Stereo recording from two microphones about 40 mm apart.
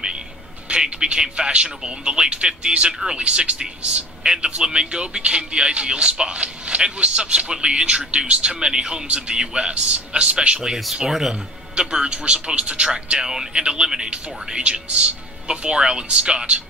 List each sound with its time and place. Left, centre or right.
0.7 s a man's voice: right
2.9 s speech: centre
3.2 s a man's voice: right
11.1 s speech: centre
11.7 s a man's voice: right